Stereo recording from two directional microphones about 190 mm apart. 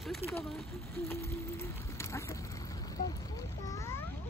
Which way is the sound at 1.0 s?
15° left (ahead or behind).